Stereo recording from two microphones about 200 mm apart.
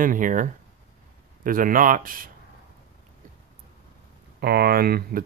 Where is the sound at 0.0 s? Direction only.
40° right (ahead or behind).